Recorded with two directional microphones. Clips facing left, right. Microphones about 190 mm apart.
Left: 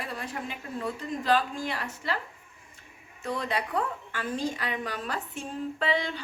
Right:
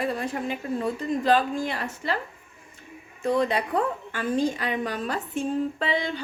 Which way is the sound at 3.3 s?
20° right (ahead or behind).